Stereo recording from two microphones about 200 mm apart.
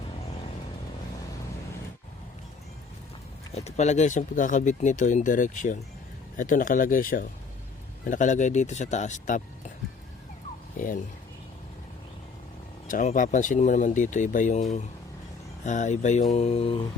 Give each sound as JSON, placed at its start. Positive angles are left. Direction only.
{"t": 3.5, "sound": "speech", "side_deg": 30}
{"t": 10.8, "sound": "speech", "side_deg": 40}
{"t": 12.9, "sound": "speech", "side_deg": 40}